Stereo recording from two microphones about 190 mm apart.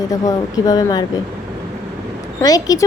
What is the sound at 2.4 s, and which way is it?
Speech, 20° left (ahead or behind).